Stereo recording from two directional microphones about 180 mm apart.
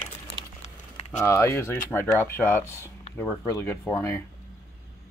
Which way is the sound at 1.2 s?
15° left (ahead or behind).